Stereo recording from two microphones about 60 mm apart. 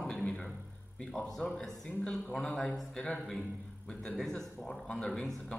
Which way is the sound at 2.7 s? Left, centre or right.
Centre.